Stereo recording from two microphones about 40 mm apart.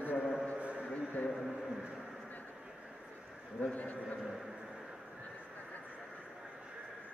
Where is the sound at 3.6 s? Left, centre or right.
Left.